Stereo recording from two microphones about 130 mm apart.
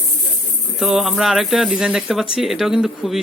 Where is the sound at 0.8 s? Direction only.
Centre (ahead or behind).